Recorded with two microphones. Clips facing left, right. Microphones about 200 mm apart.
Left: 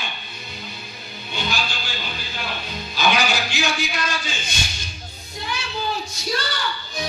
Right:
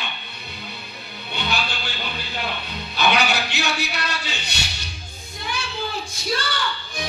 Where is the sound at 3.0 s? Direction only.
60° right (ahead or behind).